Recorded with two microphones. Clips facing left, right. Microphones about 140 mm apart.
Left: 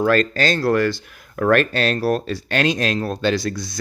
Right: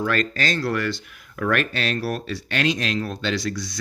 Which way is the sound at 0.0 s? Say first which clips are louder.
Left 6 dB; 35° left (ahead or behind).